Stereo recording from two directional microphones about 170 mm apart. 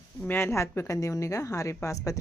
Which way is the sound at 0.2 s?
10° left (ahead or behind).